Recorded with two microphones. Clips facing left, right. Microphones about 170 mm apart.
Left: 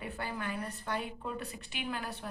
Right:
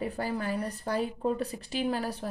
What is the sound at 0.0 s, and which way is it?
Speech, 35° right (ahead or behind).